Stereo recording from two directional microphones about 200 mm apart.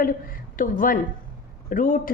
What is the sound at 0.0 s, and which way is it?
A woman's voice, 45° left (ahead or behind).